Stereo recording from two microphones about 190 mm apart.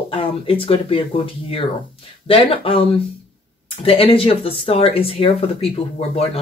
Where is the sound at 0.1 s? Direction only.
30° left (ahead or behind).